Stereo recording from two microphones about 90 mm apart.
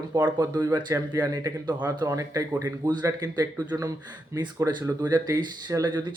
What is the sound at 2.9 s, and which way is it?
Speech, 50° right (ahead or behind).